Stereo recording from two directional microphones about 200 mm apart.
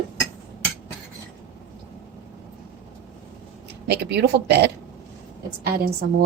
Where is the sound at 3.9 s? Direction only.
55° right (ahead or behind).